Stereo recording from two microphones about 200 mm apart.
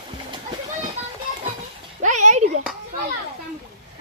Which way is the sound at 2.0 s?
35° right (ahead or behind).